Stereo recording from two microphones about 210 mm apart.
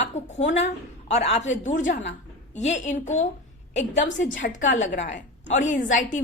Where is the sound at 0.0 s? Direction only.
35° left (ahead or behind).